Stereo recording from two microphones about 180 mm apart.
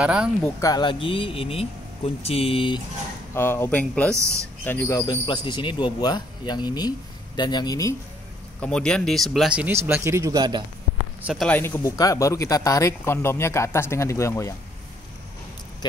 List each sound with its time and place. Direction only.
0.0 s speech: 5° right (ahead or behind)
0.6 s speech: 20° left (ahead or behind)
3.3 s speech: 15° left (ahead or behind)
4.1 s speech: 15° right (ahead or behind)
4.6 s speech: 15° left (ahead or behind)
8.5 s speech: 5° left (ahead or behind)
9.8 s speech: 15° right (ahead or behind)
11.2 s speech: 5° left (ahead or behind)